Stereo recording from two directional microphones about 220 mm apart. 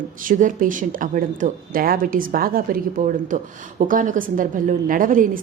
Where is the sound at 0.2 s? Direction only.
35° right (ahead or behind).